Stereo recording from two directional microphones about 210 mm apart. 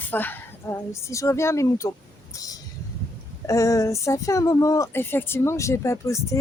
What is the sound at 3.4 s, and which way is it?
Speech, 15° left (ahead or behind).